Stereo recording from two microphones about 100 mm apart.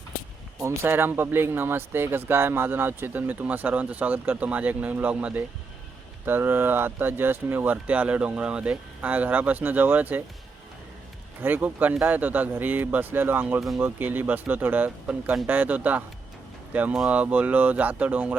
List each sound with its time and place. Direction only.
0.6 s speech: 25° right (ahead or behind)
11.4 s speech: 20° right (ahead or behind)